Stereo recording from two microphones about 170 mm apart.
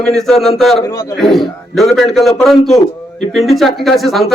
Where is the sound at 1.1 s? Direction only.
Centre (ahead or behind).